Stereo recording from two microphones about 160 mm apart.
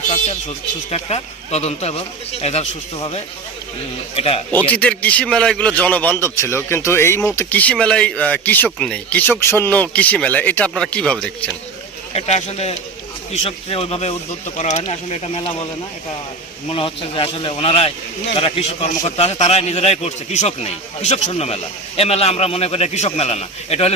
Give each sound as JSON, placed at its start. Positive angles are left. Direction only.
{"t": 0.9, "sound": "speech", "side_deg": 40}
{"t": 4.5, "sound": "speech", "side_deg": 10}
{"t": 12.1, "sound": "speech", "side_deg": 40}
{"t": 16.6, "sound": "speech", "side_deg": 35}